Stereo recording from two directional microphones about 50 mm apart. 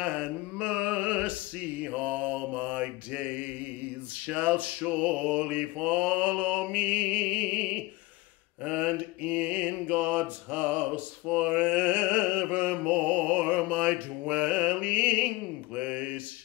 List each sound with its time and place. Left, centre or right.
0.0 s mantra: right